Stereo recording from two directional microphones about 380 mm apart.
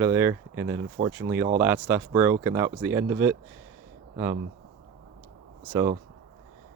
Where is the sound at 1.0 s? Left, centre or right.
Right.